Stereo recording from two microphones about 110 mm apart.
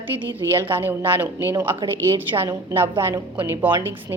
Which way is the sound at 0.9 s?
15° right (ahead or behind).